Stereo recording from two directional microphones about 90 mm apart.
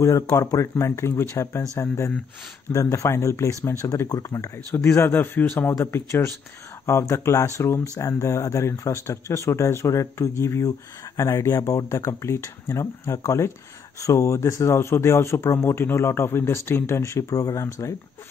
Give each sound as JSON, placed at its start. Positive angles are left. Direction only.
{"t": 0.4, "sound": "a man's voice", "side_deg": 35}